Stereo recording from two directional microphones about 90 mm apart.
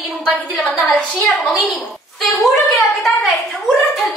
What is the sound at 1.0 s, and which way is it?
Speech, 15° left (ahead or behind).